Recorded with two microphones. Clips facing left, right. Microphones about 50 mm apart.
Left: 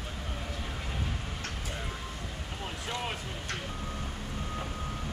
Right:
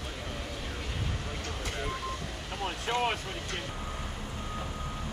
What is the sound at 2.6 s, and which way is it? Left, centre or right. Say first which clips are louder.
Vehicle: right 6 dB; right.